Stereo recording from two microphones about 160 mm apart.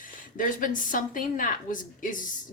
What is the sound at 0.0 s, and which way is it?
A woman's voice, 55° left (ahead or behind).